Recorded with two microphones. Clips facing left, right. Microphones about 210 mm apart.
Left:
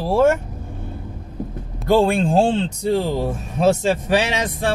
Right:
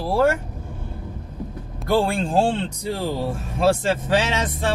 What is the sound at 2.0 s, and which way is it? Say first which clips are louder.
Speech: left 3 dB; 20° left (ahead or behind).